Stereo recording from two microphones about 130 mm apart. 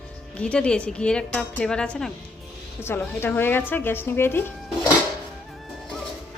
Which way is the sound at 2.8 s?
20° left (ahead or behind).